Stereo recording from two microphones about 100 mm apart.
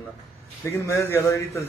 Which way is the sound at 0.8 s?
25° left (ahead or behind).